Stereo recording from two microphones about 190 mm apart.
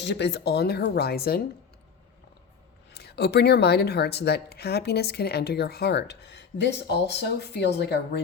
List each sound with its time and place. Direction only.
0.0 s a woman's voice: 65° left (ahead or behind)
2.9 s a woman's voice: 60° left (ahead or behind)